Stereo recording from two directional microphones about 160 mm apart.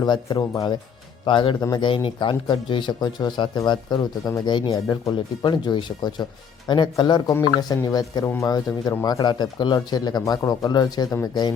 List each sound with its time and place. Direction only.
0.0 s speech: 25° left (ahead or behind)